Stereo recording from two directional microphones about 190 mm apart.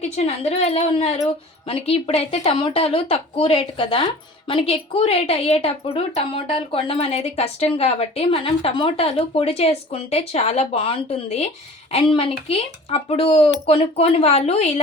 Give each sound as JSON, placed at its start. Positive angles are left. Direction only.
{"t": 0.0, "sound": "a woman's voice", "side_deg": 35}